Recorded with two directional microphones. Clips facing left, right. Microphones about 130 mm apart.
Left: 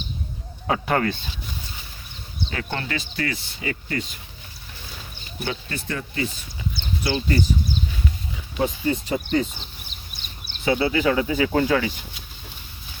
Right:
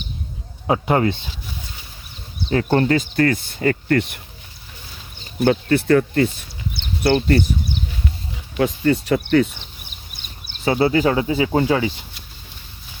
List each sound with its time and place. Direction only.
0.7 s speech: 20° right (ahead or behind)
2.5 s speech: 40° right (ahead or behind); by 4.2 s 65° right (ahead or behind)
5.5 s speech: 60° right (ahead or behind)
6.7 s a sound: 65° right (ahead or behind)
8.5 s speech: 80° right
10.7 s speech: 40° right (ahead or behind); by 11.9 s 25° right (ahead or behind)